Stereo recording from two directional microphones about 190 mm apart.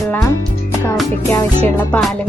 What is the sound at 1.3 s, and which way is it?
Speech, 10° left (ahead or behind).